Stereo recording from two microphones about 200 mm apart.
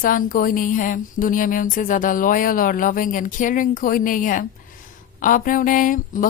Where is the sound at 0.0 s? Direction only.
45° left (ahead or behind).